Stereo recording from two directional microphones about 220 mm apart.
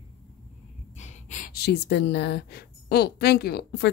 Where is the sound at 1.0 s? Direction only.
35° left (ahead or behind); by 3.9 s 50° left (ahead or behind).